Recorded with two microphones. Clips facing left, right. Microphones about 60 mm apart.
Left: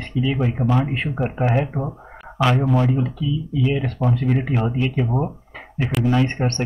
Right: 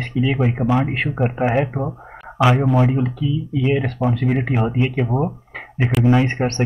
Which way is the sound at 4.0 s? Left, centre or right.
Centre.